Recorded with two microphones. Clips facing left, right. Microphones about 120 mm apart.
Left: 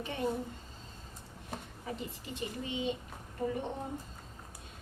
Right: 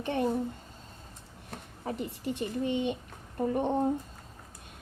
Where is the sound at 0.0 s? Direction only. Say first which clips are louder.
Right 7 dB; 65° right (ahead or behind).